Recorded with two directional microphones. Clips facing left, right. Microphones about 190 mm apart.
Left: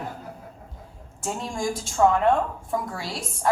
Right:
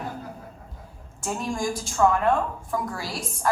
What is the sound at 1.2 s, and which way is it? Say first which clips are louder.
A woman's voice: right 1 dB; 25° left (ahead or behind).